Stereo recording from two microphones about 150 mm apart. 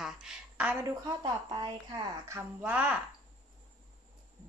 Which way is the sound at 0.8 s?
25° right (ahead or behind).